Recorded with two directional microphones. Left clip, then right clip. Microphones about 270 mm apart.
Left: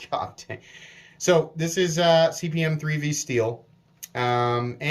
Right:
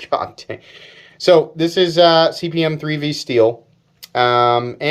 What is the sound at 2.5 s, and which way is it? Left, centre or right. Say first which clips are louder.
Speech: right 9 dB; centre.